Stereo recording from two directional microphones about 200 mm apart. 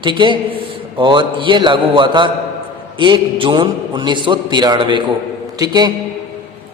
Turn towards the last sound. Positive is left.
turn(degrees=-20)  # may be behind; listen again after turning